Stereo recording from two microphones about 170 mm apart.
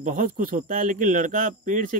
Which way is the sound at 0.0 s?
50° right (ahead or behind).